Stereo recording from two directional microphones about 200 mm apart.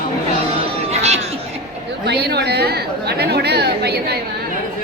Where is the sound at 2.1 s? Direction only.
55° right (ahead or behind).